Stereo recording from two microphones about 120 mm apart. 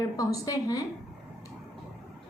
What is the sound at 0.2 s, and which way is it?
Speech, 30° left (ahead or behind).